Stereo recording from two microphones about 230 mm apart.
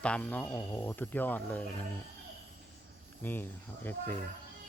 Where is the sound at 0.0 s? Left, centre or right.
Centre.